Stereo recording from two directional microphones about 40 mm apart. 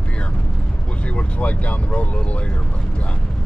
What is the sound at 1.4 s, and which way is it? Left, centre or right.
Speech, left.